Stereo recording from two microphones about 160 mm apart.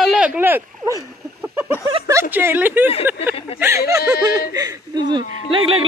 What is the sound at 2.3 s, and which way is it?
A woman's voice, 10° right (ahead or behind).